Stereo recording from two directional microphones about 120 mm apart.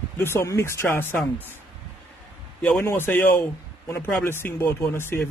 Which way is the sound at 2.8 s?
20° left (ahead or behind).